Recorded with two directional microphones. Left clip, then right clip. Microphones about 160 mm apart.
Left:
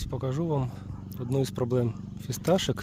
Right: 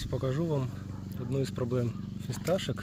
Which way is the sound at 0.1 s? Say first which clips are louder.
Left 2 dB; 35° left (ahead or behind).